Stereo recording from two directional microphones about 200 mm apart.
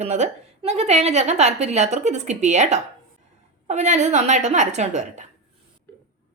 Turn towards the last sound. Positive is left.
turn(degrees=-35)  # may be behind; listen again after turning